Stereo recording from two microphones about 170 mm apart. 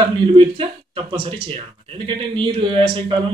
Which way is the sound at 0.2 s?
30° right (ahead or behind).